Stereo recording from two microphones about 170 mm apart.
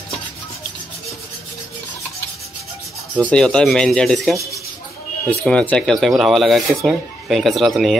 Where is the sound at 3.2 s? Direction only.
5° left (ahead or behind).